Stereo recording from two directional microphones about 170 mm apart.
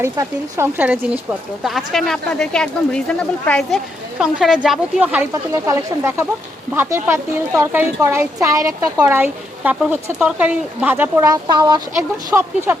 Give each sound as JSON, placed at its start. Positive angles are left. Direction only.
{"t": 0.0, "sound": "a woman's voice", "side_deg": -15}
{"t": 1.6, "sound": "speech", "side_deg": 0}
{"t": 5.3, "sound": "a woman's voice", "side_deg": -20}